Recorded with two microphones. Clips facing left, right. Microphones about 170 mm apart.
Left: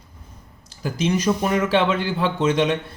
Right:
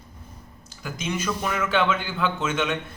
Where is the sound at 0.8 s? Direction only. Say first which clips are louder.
Left 8 dB; 35° left (ahead or behind).